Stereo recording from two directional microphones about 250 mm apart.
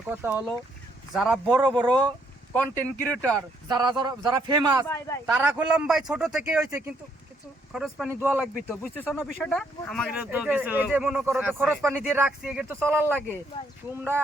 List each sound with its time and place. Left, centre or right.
0.1 s a man's voice: centre
1.5 s a man's voice: centre
3.2 s speech: centre
3.7 s a man's voice: centre
4.9 s speech: centre
5.2 s speech: centre
8.6 s speech: centre